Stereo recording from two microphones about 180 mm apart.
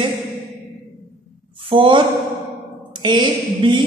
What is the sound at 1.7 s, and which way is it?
A man's voice, 25° right (ahead or behind).